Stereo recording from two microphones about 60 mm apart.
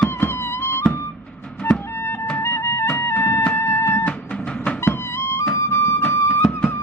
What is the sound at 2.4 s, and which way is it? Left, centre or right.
Music, left.